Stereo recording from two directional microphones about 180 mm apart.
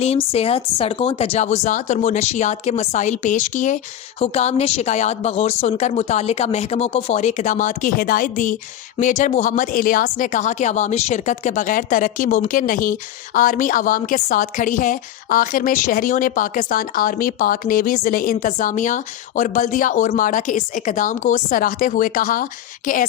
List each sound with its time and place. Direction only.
0.0 s a woman's voice: 35° left (ahead or behind); by 22.4 s 50° left (ahead or behind)